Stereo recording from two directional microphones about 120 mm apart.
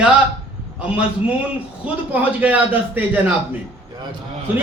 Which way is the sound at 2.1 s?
15° right (ahead or behind).